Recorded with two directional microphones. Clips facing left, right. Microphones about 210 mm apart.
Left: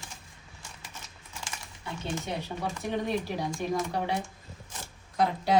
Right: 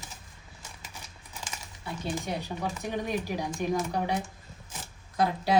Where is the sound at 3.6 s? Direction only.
10° right (ahead or behind).